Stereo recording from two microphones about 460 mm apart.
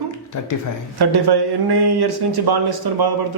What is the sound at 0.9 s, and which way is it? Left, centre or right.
Speech, right.